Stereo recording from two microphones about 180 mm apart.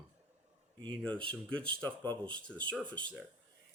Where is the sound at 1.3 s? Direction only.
5° left (ahead or behind).